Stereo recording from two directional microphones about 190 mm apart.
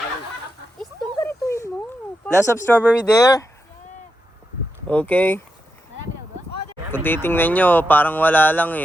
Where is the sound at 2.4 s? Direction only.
10° left (ahead or behind).